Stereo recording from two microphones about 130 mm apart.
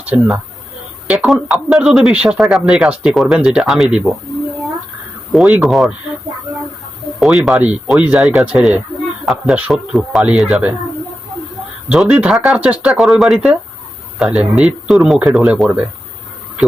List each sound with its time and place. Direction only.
0.1 s speech: 15° right (ahead or behind)
1.0 s speech: centre (ahead or behind)
5.3 s speech: 5° right (ahead or behind)
7.2 s speech: centre (ahead or behind)
11.9 s speech: 10° right (ahead or behind)